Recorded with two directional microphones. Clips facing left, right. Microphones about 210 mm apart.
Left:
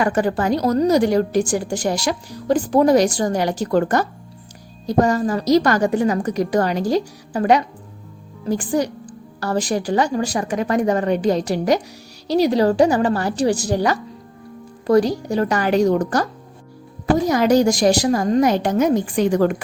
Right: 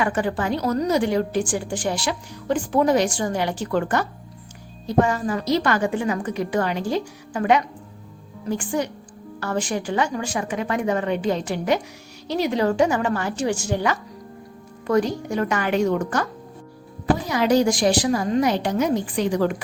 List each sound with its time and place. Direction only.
0.0 s a woman's voice: 40° left (ahead or behind)